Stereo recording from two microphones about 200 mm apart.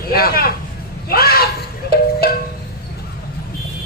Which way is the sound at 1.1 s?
50° left (ahead or behind).